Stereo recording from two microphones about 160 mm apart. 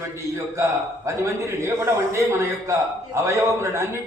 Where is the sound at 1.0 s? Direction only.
15° right (ahead or behind).